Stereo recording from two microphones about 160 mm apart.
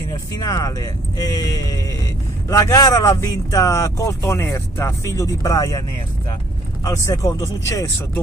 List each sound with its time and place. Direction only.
0.4 s speech: 25° left (ahead or behind)